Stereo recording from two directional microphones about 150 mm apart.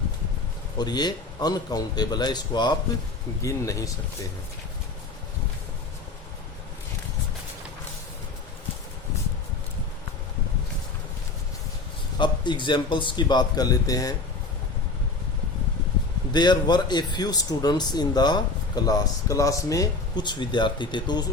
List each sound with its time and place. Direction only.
0.8 s speech: 30° left (ahead or behind)
12.1 s a man's voice: 30° left (ahead or behind)
16.3 s speech: 30° left (ahead or behind)